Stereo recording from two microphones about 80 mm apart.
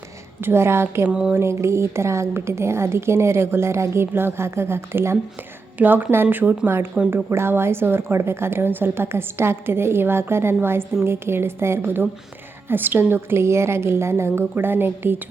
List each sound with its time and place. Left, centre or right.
0.4 s a woman's voice: right